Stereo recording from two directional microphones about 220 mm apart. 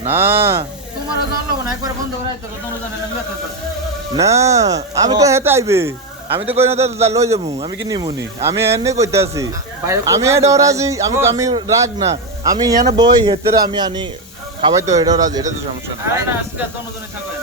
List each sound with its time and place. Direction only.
0.1 s speech: 10° right (ahead or behind)
4.1 s speech: 15° right (ahead or behind)